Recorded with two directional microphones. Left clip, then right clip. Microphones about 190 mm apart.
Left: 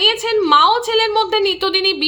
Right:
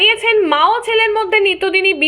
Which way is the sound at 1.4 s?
60° left (ahead or behind).